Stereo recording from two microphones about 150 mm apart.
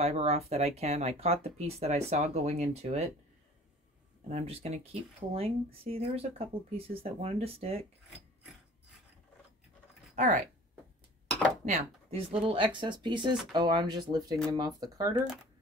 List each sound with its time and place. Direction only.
0.0 s speech: 40° right (ahead or behind)
4.3 s speech: 45° right (ahead or behind)
10.1 s speech: 55° right (ahead or behind)
11.6 s speech: 45° right (ahead or behind); by 15.2 s 25° right (ahead or behind)